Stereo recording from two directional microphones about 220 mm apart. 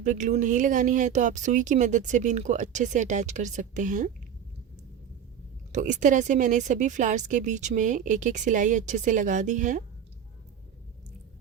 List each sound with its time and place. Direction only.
0.0 s speech: 35° right (ahead or behind)
5.7 s speech: 35° right (ahead or behind)